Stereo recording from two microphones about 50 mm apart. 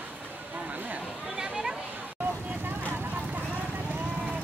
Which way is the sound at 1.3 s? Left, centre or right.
Centre.